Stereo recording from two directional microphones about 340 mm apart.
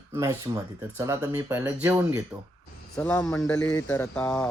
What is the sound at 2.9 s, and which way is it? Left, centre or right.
Speech, centre.